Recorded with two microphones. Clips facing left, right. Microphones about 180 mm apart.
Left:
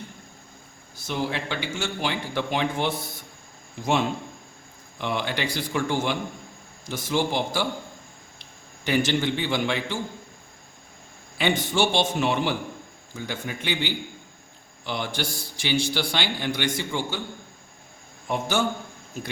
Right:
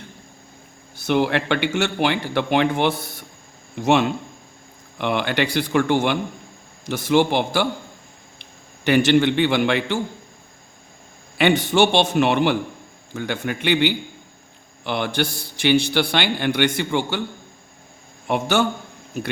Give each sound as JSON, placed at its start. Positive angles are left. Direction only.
{"t": 0.9, "sound": "a man's voice", "side_deg": -65}
{"t": 11.3, "sound": "a man's voice", "side_deg": -65}
{"t": 18.3, "sound": "speech", "side_deg": -70}